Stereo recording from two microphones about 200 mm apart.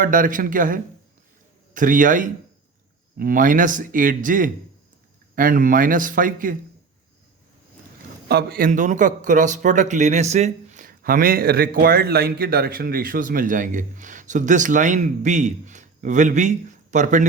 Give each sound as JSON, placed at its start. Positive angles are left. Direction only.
{"t": 0.0, "sound": "a man's voice", "side_deg": -45}
{"t": 8.3, "sound": "a man's voice", "side_deg": -50}